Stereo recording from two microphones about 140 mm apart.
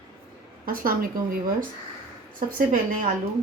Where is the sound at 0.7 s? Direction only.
90° right.